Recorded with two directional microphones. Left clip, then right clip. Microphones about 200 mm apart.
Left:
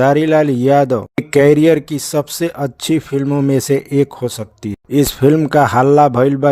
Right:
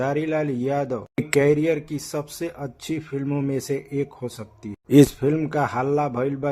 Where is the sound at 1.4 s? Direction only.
40° left (ahead or behind).